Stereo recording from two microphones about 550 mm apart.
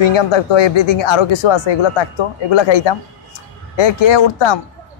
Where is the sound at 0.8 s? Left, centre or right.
Left.